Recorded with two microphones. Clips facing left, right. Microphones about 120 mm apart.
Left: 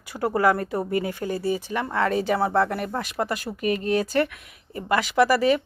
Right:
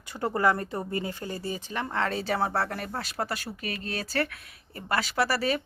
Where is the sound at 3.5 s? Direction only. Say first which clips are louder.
Left 6 dB; 50° left (ahead or behind).